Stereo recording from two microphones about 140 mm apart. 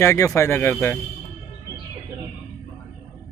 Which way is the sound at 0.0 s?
15° left (ahead or behind).